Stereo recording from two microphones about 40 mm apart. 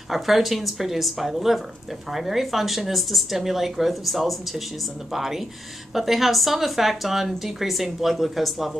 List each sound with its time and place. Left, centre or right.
0.1 s a woman's voice: centre